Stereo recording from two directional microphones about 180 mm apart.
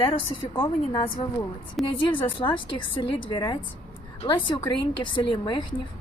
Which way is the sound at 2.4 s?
25° left (ahead or behind).